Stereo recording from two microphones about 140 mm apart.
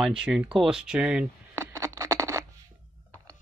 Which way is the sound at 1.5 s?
20° right (ahead or behind).